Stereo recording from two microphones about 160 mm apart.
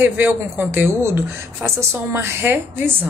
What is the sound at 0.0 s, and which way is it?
Speech, 10° right (ahead or behind).